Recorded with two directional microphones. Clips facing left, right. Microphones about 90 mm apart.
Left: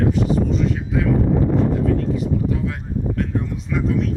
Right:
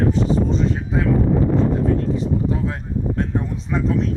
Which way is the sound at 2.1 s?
30° right (ahead or behind).